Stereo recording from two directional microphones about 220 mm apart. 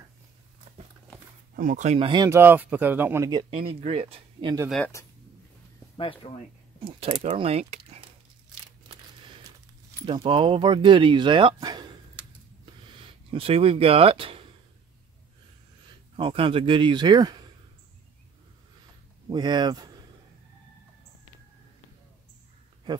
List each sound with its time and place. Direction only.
1.6 s speech: 35° right (ahead or behind)
4.6 s speech: 5° left (ahead or behind)
5.9 s speech: 25° left (ahead or behind)
6.8 s speech: 25° right (ahead or behind)
10.0 s speech: 25° right (ahead or behind)
16.2 s speech: 25° right (ahead or behind)
19.2 s speech: 20° right (ahead or behind)